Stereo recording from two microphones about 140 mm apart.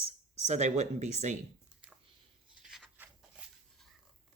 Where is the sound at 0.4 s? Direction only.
55° right (ahead or behind).